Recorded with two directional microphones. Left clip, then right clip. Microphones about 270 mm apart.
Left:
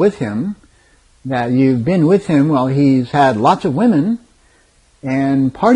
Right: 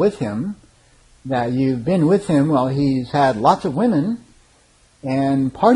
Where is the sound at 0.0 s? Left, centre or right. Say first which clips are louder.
Left 4 dB; left.